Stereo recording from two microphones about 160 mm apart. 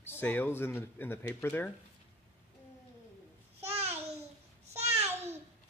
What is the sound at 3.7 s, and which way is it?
Babbling, 40° right (ahead or behind).